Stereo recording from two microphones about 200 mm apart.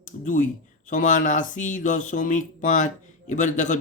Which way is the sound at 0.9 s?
40° left (ahead or behind).